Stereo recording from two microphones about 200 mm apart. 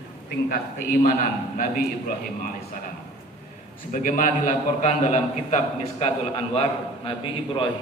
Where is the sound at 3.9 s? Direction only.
40° left (ahead or behind).